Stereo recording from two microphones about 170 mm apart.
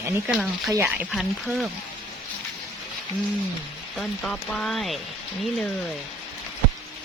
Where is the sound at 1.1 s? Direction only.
Centre (ahead or behind).